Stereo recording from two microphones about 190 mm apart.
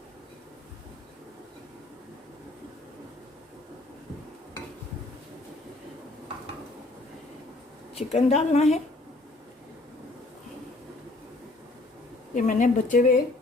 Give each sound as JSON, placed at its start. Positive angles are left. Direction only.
{"t": 7.9, "sound": "speech", "side_deg": 35}
{"t": 12.3, "sound": "speech", "side_deg": 40}